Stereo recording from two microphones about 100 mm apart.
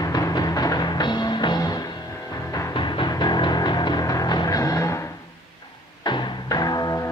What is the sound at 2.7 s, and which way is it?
Music, 50° left (ahead or behind).